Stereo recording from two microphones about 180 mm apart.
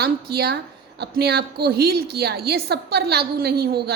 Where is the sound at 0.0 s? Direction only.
65° right (ahead or behind).